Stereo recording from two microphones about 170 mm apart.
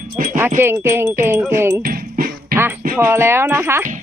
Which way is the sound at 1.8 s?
60° right (ahead or behind).